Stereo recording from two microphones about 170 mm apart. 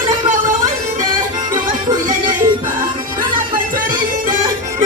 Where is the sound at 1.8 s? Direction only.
25° right (ahead or behind).